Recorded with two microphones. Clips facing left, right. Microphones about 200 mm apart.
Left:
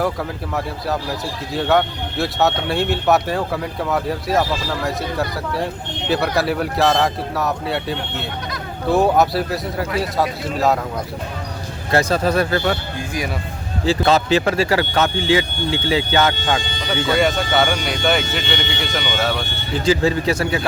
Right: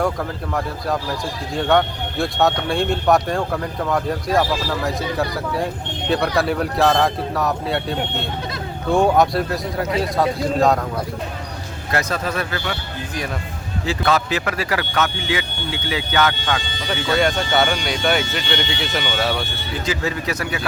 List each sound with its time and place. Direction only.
1.5 s speech: centre (ahead or behind)
11.9 s speech: 30° left (ahead or behind)
13.8 s speech: 25° left (ahead or behind)
17.2 s speech: centre (ahead or behind)
19.8 s speech: 30° left (ahead or behind)